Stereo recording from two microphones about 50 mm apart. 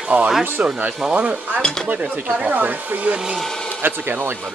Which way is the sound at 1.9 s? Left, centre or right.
Right.